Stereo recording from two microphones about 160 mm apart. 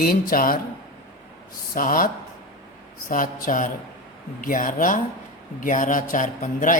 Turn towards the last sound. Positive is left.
turn(degrees=55)  # may be behind; listen again after turning